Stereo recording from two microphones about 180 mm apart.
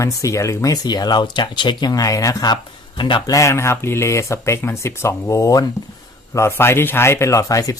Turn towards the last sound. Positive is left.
turn(degrees=20)  # may be behind; listen again after turning